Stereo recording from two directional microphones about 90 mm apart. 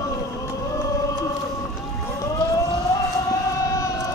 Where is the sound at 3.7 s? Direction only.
40° left (ahead or behind).